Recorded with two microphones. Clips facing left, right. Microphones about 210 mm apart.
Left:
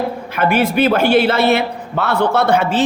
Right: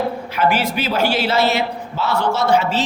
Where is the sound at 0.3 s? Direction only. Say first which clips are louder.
Left 5 dB; 55° left (ahead or behind).